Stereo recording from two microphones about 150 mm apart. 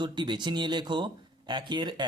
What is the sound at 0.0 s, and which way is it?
Speech, 30° right (ahead or behind).